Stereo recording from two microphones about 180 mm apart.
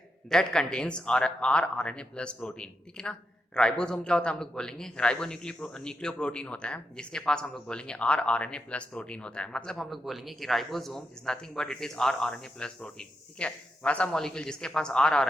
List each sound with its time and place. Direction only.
0.3 s speech: 5° left (ahead or behind)